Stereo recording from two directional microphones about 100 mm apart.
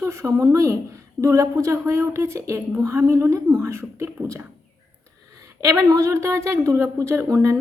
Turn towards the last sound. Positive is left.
turn(degrees=-30)  # may be behind; listen again after turning